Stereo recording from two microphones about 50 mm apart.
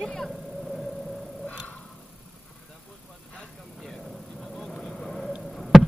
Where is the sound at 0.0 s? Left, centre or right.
Centre.